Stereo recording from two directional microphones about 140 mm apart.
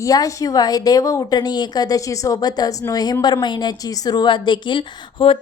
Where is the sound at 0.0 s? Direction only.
25° left (ahead or behind).